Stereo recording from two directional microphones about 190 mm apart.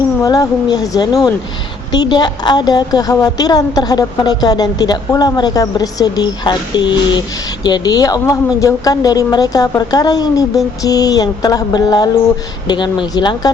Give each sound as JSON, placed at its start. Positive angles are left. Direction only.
{"t": 0.2, "sound": "a woman's voice", "side_deg": 20}